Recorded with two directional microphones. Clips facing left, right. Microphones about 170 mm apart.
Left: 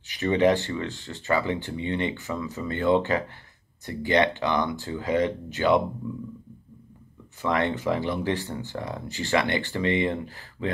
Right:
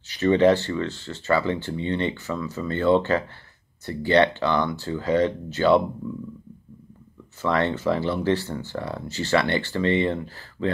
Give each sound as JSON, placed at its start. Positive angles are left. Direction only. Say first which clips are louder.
{"t": 0.1, "sound": "speech", "louder": "right 3 dB", "side_deg": 15}
{"t": 7.4, "sound": "speech", "louder": "right 2 dB", "side_deg": 15}